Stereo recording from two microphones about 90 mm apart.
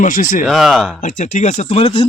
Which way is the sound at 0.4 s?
Centre (ahead or behind).